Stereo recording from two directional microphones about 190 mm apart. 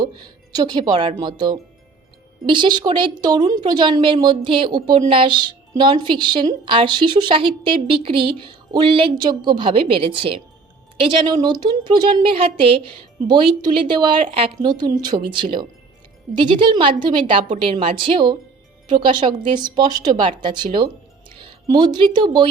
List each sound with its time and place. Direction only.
0.0 s a woman's voice: 20° right (ahead or behind)
19.5 s speech: 20° right (ahead or behind)